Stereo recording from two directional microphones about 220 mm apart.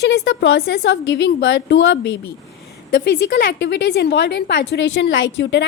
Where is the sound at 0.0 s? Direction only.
50° left (ahead or behind).